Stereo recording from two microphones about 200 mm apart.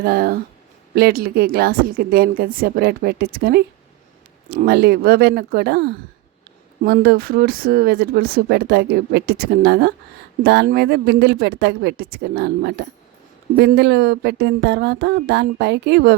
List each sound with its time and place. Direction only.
0.0 s speech: 50° right (ahead or behind)